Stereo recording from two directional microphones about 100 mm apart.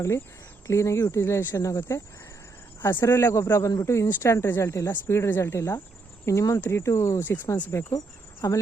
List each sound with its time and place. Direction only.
0.7 s speech: 30° left (ahead or behind)
7.9 s cricket: 35° left (ahead or behind)